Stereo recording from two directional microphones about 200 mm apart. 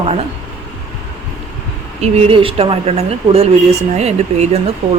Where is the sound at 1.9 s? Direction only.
30° right (ahead or behind).